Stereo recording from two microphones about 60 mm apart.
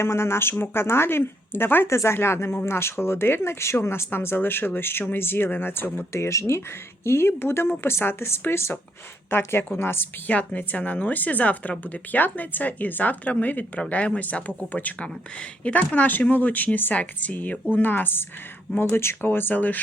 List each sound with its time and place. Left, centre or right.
0.0 s speech: left
6.5 s speech: left
10.2 s speech: left